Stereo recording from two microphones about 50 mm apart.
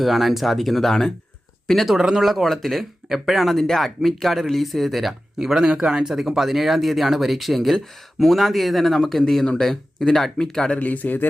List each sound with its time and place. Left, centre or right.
0.0 s speech: centre
1.9 s speech: centre
2.2 s speech: centre
10.8 s speech: left